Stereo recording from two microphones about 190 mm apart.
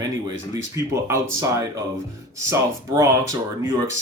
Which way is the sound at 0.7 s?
15° right (ahead or behind).